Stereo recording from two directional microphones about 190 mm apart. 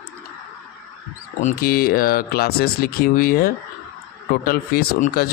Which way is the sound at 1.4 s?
45° left (ahead or behind).